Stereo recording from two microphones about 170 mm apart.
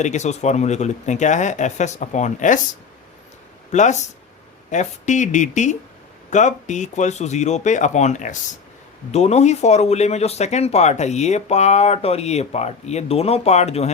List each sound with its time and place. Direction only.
0.0 s speech: 45° left (ahead or behind)
3.7 s speech: 45° left (ahead or behind)